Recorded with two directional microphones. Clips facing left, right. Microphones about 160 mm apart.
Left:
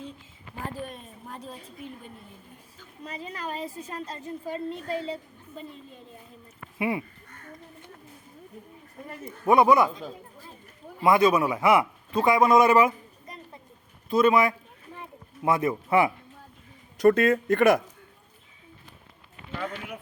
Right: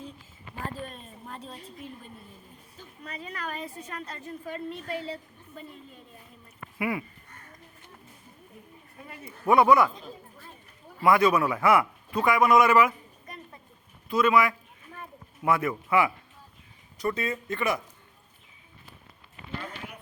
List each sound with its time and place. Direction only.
0.6 s speech: 10° left (ahead or behind)
3.0 s a woman's voice: 25° left (ahead or behind)
9.5 s a woman's voice: 20° left (ahead or behind)
11.0 s a woman's voice: 20° left (ahead or behind)
12.5 s a sound: 25° left (ahead or behind)
14.1 s a woman's voice: 25° left (ahead or behind)
17.0 s speech: 75° left (ahead or behind)
19.5 s a sound: 90° left